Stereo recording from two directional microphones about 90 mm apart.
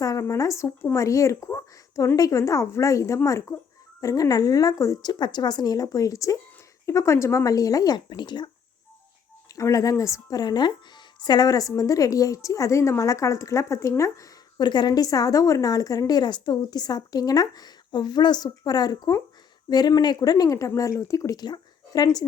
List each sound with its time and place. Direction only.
0.0 s a woman's voice: 40° left (ahead or behind)
5.2 s a woman's voice: 50° left (ahead or behind)
9.6 s a woman's voice: 40° left (ahead or behind)
14.6 s a woman's voice: 55° left (ahead or behind)